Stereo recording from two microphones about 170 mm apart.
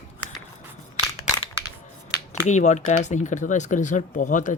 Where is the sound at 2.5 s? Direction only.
45° left (ahead or behind).